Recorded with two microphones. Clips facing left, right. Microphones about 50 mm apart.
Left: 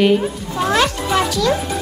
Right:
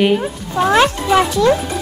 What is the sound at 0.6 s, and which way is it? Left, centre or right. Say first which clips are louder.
Speech: right 4 dB; right.